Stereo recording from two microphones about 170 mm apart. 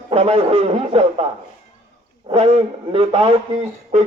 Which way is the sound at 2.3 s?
35° right (ahead or behind).